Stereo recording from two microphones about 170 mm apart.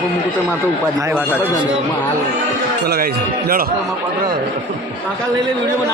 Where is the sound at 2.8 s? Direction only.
65° right (ahead or behind).